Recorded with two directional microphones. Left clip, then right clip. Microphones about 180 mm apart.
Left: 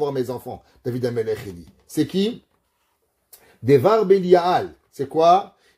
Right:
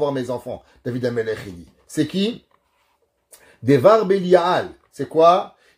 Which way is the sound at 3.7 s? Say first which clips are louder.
Right 1 dB; 35° left (ahead or behind).